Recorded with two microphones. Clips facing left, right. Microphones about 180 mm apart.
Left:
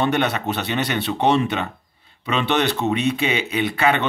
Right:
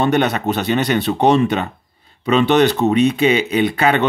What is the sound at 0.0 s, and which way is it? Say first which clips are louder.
Speech: right 4 dB; 40° right (ahead or behind).